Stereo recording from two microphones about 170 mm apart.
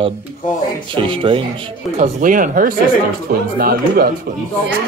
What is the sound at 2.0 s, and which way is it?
Speech, 50° right (ahead or behind).